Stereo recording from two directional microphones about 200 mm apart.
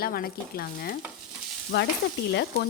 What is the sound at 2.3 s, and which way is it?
Stir, 55° left (ahead or behind).